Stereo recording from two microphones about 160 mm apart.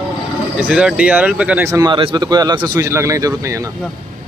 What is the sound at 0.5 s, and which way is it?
Speech, 5° right (ahead or behind).